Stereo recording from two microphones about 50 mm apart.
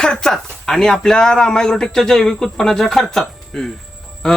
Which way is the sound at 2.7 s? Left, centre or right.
Centre.